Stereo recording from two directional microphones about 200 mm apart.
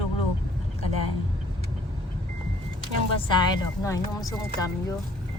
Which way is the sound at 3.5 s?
15° left (ahead or behind).